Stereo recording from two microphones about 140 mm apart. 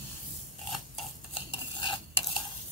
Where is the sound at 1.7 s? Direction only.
35° left (ahead or behind).